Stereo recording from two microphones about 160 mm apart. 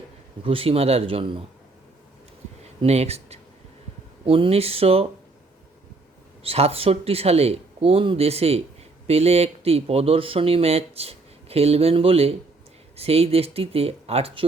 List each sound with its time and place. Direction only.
0.4 s speech: 35° right (ahead or behind)
2.8 s speech: 40° right (ahead or behind)
6.4 s speech: 40° right (ahead or behind)